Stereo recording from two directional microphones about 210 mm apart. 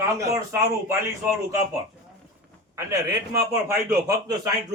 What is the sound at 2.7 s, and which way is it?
A man's voice, 15° right (ahead or behind).